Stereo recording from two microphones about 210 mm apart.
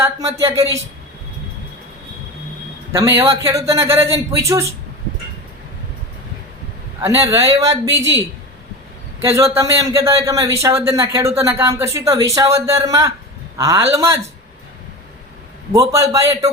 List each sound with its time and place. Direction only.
0.0 s a man's voice: 15° right (ahead or behind)
3.0 s a man's voice: 10° right (ahead or behind)
7.0 s a man's voice: 15° right (ahead or behind)
9.2 s a man's voice: 15° right (ahead or behind)
15.7 s a man's voice: 15° right (ahead or behind)